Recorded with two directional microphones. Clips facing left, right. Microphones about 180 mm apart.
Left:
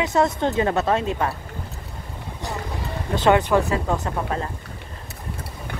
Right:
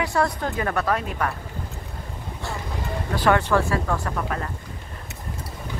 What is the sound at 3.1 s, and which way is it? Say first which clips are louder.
Speech: left 3 dB; 20° left (ahead or behind).